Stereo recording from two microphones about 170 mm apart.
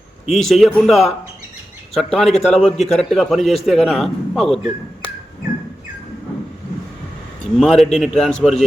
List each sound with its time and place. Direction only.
0.3 s a man's voice: centre (ahead or behind)
2.3 s a man's voice: 40° left (ahead or behind)
2.6 s a man's voice: centre (ahead or behind)
7.6 s a man's voice: centre (ahead or behind)